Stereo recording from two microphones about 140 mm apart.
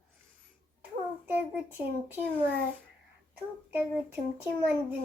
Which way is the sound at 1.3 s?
10° right (ahead or behind).